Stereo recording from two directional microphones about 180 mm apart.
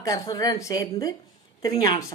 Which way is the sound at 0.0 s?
20° left (ahead or behind).